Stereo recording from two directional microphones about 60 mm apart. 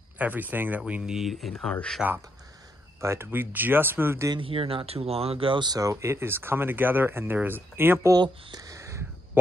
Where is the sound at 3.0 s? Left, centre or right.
Right.